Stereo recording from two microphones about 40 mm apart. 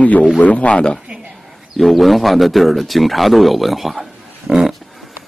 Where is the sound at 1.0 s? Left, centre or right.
Right.